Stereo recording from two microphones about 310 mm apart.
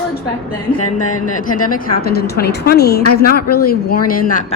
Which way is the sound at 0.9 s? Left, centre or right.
Left.